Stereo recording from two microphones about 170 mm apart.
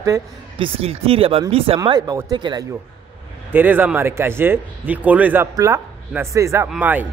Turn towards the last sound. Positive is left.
turn(degrees=-10)  # may be behind; listen again after turning